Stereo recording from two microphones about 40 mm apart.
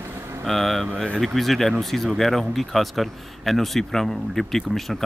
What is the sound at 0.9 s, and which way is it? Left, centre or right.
Speech, left.